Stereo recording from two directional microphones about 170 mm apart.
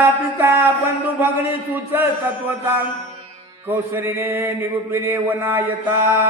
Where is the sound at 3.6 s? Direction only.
15° right (ahead or behind).